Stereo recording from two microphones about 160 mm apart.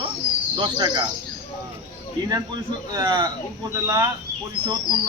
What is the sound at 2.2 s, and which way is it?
A man's voice, 25° right (ahead or behind).